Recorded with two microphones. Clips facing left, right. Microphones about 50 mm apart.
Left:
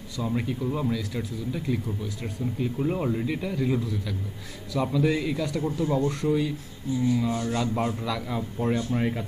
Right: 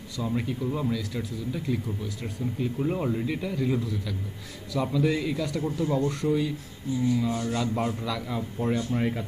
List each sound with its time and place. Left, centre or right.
0.2 s speech: centre
5.8 s speech: centre
6.2 s speech: centre